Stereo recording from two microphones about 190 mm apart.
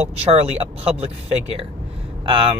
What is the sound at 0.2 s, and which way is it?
Speech, 35° right (ahead or behind).